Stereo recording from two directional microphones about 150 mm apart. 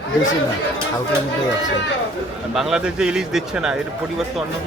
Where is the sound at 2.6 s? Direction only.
5° right (ahead or behind).